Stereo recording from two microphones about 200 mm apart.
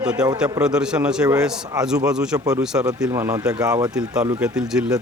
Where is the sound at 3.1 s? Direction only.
15° right (ahead or behind).